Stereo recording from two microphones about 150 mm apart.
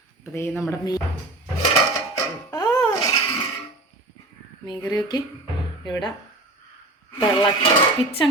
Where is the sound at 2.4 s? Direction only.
25° left (ahead or behind).